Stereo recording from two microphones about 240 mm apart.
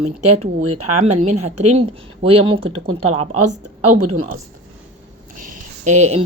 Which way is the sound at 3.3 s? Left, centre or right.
Right.